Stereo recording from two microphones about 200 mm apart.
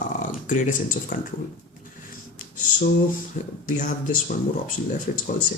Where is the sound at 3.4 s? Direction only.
40° left (ahead or behind).